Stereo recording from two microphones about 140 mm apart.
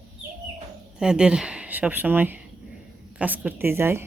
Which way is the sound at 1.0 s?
5° right (ahead or behind).